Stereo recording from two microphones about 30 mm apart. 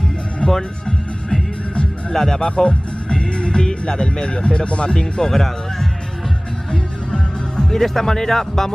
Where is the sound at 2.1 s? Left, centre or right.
Centre.